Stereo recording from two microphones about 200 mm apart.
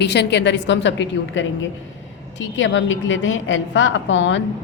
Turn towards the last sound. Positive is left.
turn(degrees=65)  # may be behind; listen again after turning